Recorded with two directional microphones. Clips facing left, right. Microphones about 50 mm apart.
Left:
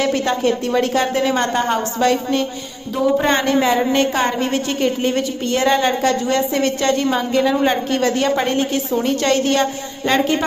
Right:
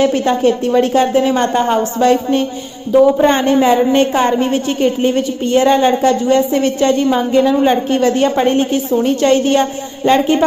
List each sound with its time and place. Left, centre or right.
0.0 s a woman's voice: centre